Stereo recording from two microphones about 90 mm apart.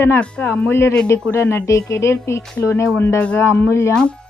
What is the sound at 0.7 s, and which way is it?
A woman's voice, 30° left (ahead or behind).